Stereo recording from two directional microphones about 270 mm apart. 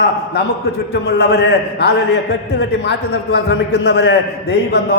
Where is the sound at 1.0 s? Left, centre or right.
Left.